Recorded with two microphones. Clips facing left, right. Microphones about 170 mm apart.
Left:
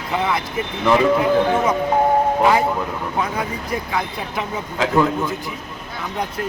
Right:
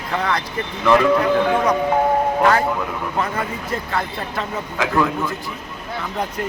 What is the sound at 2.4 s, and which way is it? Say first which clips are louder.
A man's voice: left 1 dB; 10° left (ahead or behind).